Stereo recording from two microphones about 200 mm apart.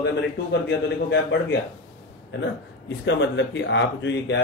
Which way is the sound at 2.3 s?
60° left (ahead or behind).